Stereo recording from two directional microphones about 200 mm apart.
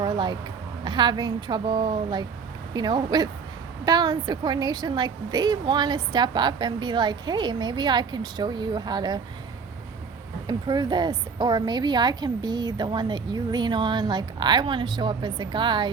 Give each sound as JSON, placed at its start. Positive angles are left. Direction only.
{"t": 0.0, "sound": "a sound", "side_deg": -20}
{"t": 0.9, "sound": "a woman's voice", "side_deg": -20}
{"t": 10.4, "sound": "a woman's voice", "side_deg": -20}